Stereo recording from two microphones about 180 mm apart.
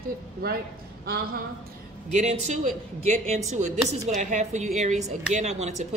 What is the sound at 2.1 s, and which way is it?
A man's voice, 40° right (ahead or behind).